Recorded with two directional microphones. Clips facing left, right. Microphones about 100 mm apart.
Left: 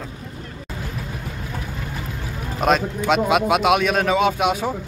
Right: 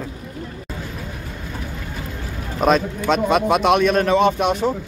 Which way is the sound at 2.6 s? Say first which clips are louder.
Right 2 dB; 5° left (ahead or behind).